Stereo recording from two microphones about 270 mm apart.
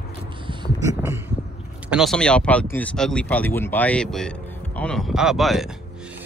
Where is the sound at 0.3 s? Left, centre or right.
Centre.